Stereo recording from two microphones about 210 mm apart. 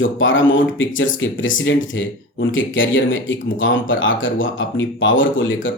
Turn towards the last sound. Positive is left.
turn(degrees=65)  # may be behind; listen again after turning